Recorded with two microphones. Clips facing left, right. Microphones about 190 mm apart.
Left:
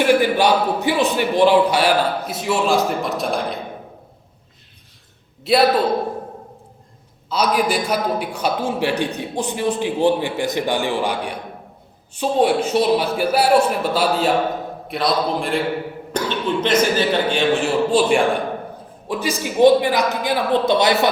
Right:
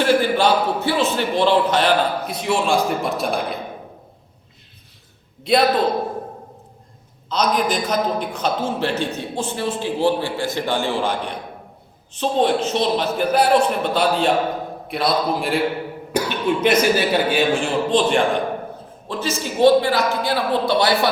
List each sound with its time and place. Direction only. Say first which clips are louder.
0.0 s a man's voice: left 1 dB; 15° left (ahead or behind); by 3.4 s centre (ahead or behind)
5.4 s a man's voice: left 1 dB; 5° left (ahead or behind)
7.3 s a man's voice: left 1 dB; 10° left (ahead or behind)